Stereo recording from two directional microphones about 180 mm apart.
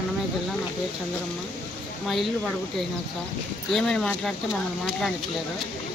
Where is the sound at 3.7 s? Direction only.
5° left (ahead or behind).